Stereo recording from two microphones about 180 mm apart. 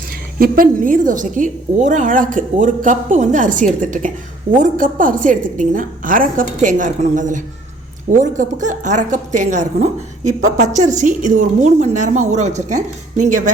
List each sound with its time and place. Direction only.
0.3 s a woman's voice: 50° right (ahead or behind)